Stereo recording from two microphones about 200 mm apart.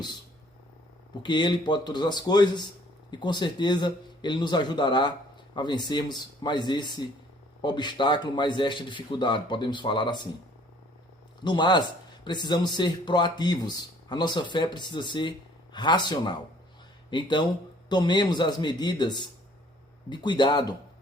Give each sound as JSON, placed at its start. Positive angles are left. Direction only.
{"t": 1.2, "sound": "speech", "side_deg": 20}
{"t": 11.4, "sound": "speech", "side_deg": 20}